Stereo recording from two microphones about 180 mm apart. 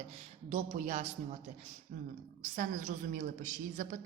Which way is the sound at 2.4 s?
45° right (ahead or behind).